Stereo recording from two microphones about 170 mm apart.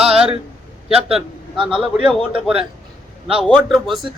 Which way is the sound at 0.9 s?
35° right (ahead or behind).